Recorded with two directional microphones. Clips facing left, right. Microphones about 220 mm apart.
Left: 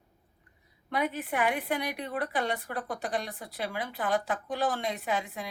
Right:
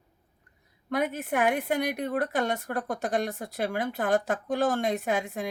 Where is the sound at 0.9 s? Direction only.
45° right (ahead or behind).